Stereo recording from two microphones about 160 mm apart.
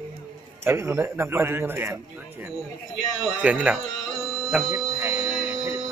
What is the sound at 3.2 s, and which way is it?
Speech, 10° right (ahead or behind).